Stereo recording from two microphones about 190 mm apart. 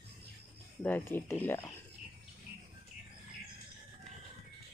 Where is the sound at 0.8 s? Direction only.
10° left (ahead or behind).